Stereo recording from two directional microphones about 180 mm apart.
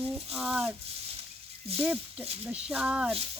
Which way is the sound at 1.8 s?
5° right (ahead or behind).